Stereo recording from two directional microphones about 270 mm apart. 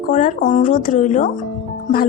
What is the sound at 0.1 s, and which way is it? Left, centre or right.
A woman's voice, left.